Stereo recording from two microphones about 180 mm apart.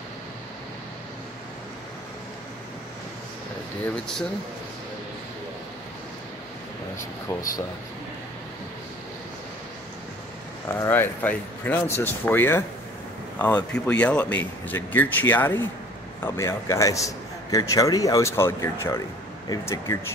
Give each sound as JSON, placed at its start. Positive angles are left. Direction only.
{"t": 3.9, "sound": "speech", "side_deg": 5}
{"t": 7.0, "sound": "air conditioning", "side_deg": 15}
{"t": 10.7, "sound": "a man's voice", "side_deg": 15}
{"t": 13.8, "sound": "a man's voice", "side_deg": 5}